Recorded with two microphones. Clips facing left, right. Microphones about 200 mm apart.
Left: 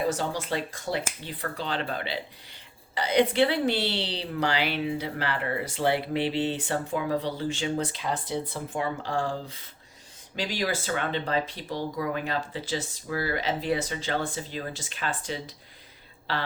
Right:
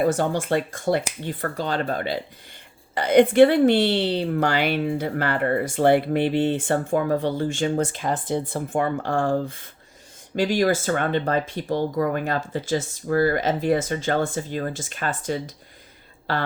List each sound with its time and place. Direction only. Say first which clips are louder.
0.0 s a woman's voice: right 7 dB; 55° right (ahead or behind)